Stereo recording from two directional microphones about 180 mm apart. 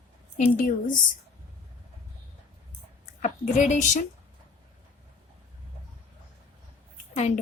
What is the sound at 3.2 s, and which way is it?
Speech, 40° left (ahead or behind).